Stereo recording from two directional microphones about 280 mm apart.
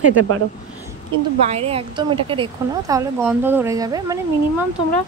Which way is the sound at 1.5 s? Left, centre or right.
Right.